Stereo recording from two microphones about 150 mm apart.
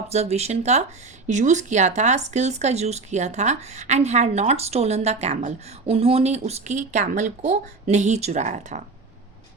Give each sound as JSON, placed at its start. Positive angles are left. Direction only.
{"t": 0.1, "sound": "speech", "side_deg": -45}